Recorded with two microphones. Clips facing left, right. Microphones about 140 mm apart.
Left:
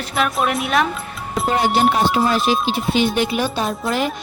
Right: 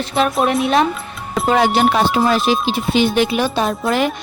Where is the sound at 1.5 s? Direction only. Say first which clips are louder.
Right 3 dB; 90° right.